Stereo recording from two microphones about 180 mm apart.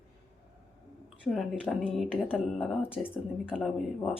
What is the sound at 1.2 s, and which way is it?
Speech, centre (ahead or behind).